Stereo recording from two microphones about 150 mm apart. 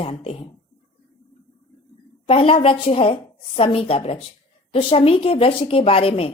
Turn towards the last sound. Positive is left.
turn(degrees=40)  # may be behind; listen again after turning